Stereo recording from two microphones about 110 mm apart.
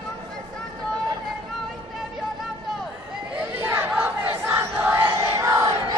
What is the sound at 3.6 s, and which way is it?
Battle cry, 15° right (ahead or behind).